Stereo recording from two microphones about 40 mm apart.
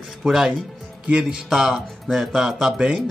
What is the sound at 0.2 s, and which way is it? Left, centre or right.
A man's voice, centre.